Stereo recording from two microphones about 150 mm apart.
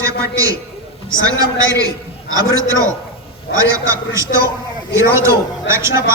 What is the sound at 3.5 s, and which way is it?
Speech, 90° left.